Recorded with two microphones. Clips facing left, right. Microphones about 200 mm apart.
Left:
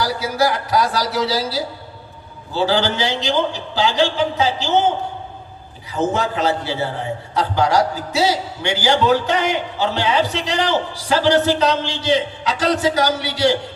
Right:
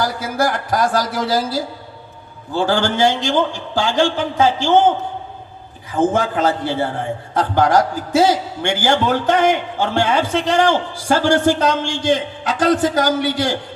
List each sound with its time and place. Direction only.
0.0 s a man's voice: 50° right (ahead or behind)
5.9 s a man's voice: 50° right (ahead or behind)